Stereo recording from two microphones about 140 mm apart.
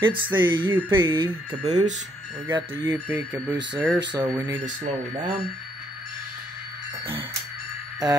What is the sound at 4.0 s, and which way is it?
Speech, 35° right (ahead or behind).